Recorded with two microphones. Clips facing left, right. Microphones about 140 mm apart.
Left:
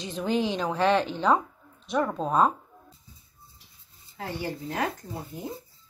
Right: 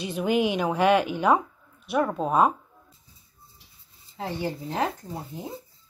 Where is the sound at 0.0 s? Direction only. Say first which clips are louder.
Right 3 dB; 10° right (ahead or behind).